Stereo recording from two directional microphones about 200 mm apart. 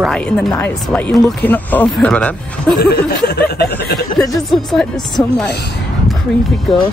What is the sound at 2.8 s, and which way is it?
Speech, 50° left (ahead or behind).